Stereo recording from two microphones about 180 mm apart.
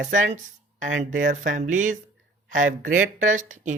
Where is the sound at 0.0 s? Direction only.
45° right (ahead or behind).